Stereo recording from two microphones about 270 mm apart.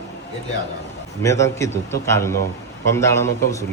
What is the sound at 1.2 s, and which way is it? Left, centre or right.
A man's voice, centre.